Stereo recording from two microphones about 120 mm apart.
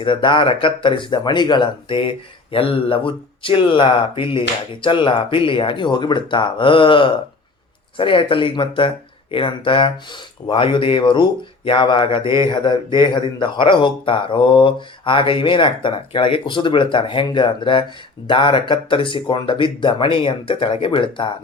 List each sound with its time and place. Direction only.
0.0 s speech: 40° left (ahead or behind)